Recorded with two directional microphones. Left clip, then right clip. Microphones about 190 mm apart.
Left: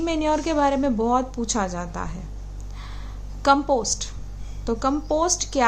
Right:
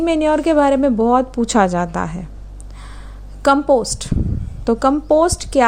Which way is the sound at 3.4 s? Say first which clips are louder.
Right 5 dB; 30° right (ahead or behind).